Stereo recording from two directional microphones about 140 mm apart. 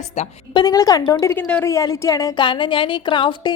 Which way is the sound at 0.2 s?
50° left (ahead or behind).